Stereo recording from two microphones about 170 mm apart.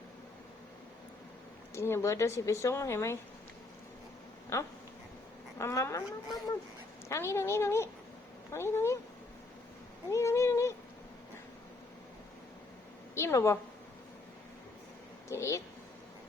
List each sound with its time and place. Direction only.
1.7 s a woman's voice: 15° left (ahead or behind)
4.5 s a woman's voice: 15° left (ahead or behind)
7.1 s a woman's voice: 15° left (ahead or behind)
10.1 s a sound: 15° left (ahead or behind)
13.1 s a woman's voice: 15° left (ahead or behind)
15.3 s a woman's voice: 15° left (ahead or behind)